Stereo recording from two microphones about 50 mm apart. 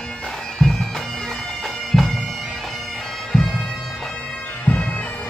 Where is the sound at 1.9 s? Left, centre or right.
Centre.